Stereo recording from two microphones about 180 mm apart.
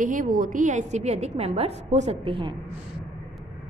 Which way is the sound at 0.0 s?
45° right (ahead or behind).